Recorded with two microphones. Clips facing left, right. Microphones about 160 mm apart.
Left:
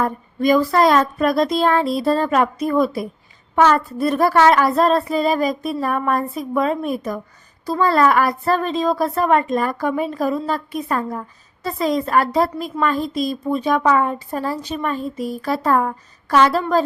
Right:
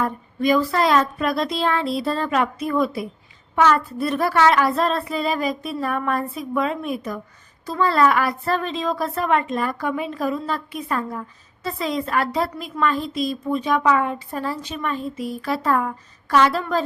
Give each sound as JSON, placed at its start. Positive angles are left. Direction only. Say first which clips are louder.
{"t": 0.0, "sound": "a woman's voice", "louder": "left 3 dB", "side_deg": 40}